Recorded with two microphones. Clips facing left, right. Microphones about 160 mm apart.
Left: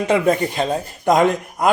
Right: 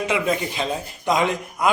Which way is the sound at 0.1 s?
45° left (ahead or behind).